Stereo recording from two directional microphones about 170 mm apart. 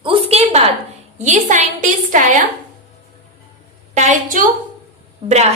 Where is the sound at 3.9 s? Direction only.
45° right (ahead or behind).